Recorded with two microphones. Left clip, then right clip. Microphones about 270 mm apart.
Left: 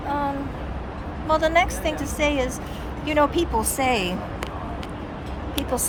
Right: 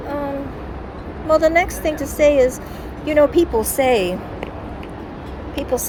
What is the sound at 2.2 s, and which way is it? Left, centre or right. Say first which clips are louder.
Speech: right 11 dB; centre.